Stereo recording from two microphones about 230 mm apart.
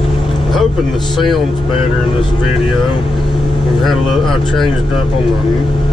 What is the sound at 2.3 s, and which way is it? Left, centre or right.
Speech, centre.